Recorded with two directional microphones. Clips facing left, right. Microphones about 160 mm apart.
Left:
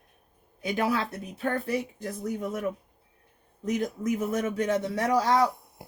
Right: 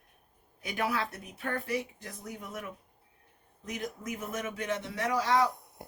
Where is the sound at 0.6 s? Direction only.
30° left (ahead or behind).